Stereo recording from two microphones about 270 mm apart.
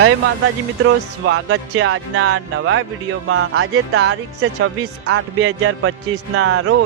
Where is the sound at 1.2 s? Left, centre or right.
Right.